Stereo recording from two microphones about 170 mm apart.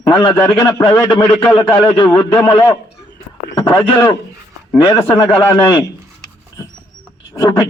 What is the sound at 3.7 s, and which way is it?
Speech, 15° left (ahead or behind).